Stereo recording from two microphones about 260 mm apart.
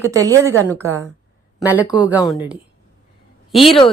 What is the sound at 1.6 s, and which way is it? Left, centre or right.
Speech, centre.